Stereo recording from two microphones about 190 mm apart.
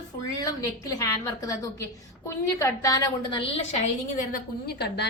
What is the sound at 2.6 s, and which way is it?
A woman's voice, 20° left (ahead or behind).